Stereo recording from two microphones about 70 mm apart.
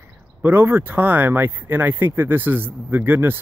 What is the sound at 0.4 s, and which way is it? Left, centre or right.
Speech, right.